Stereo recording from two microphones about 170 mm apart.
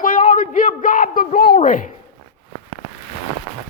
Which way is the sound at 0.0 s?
55° left (ahead or behind).